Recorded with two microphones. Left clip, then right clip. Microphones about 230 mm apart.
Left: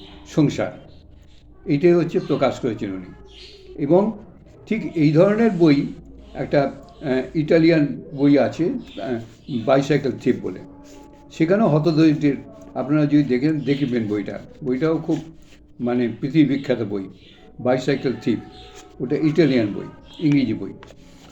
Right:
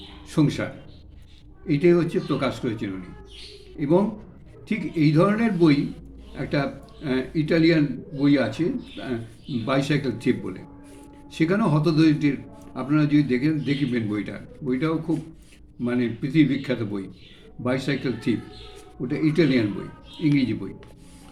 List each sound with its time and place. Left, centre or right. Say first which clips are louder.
0.3 s a man's voice: left 4 dB; centre